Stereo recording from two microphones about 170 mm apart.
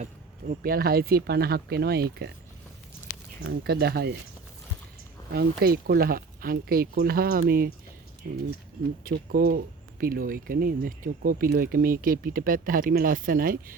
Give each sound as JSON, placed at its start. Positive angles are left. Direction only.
{"t": 0.0, "sound": "speech", "side_deg": -55}
{"t": 3.6, "sound": "speech", "side_deg": -65}
{"t": 5.3, "sound": "speech", "side_deg": -70}
{"t": 9.0, "sound": "speech", "side_deg": -60}